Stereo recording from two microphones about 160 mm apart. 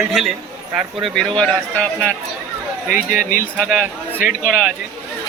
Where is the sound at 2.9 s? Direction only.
60° left (ahead or behind).